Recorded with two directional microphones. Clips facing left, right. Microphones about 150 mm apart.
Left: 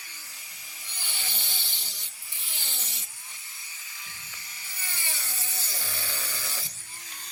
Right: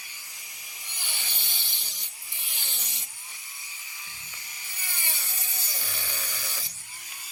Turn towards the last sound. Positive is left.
turn(degrees=-15)  # may be behind; listen again after turning